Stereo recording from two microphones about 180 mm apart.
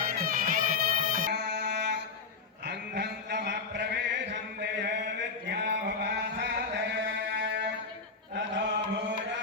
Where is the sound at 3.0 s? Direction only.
70° right (ahead or behind).